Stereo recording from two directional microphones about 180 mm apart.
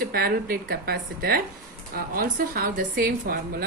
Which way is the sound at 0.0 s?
55° right (ahead or behind).